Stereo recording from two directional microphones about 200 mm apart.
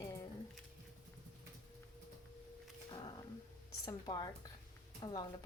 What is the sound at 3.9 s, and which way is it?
A woman's voice, 20° left (ahead or behind).